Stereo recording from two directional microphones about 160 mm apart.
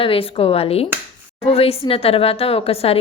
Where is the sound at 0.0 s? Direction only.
35° left (ahead or behind).